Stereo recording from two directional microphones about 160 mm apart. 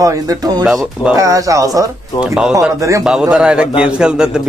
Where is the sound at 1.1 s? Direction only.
20° right (ahead or behind).